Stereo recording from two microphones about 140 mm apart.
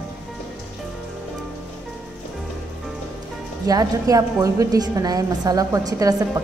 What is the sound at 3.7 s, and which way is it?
A woman's voice, 25° right (ahead or behind).